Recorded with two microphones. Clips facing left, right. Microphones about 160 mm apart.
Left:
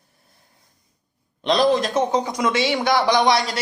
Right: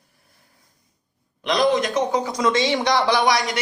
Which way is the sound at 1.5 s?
30° left (ahead or behind).